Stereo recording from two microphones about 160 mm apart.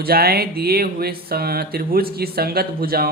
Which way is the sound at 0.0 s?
70° right (ahead or behind).